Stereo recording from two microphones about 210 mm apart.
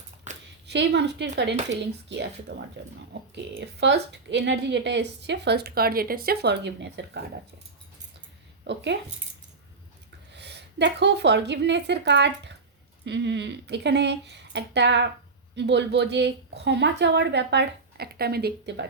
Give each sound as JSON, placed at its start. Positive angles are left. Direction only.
{"t": 0.7, "sound": "speech", "side_deg": -55}
{"t": 8.6, "sound": "speech", "side_deg": -55}
{"t": 10.3, "sound": "a woman's voice", "side_deg": -55}